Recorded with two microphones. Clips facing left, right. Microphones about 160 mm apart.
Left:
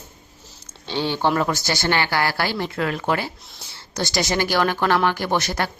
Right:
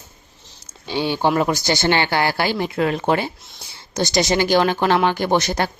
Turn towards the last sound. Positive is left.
turn(degrees=-20)  # may be behind; listen again after turning